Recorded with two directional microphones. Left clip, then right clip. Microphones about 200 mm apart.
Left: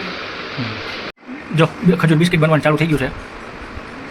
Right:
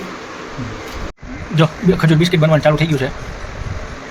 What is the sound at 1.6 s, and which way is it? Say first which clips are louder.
Speech: even; 20° right (ahead or behind).